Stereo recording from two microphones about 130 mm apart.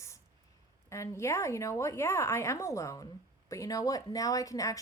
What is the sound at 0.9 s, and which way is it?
A woman's voice, 20° left (ahead or behind).